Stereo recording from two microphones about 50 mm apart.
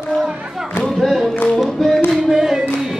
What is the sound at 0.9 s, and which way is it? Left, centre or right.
Music, centre.